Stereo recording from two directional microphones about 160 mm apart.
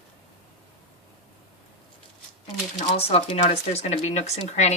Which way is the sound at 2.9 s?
35° left (ahead or behind).